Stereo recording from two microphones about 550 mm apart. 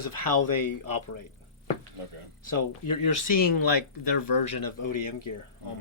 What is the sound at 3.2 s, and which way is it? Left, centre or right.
Speech, left.